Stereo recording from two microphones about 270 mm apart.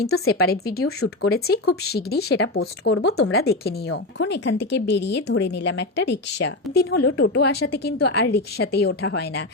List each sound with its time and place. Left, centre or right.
0.3 s a woman's voice: left
0.8 s speech: left
1.8 s a woman's voice: left
3.3 s a woman's voice: left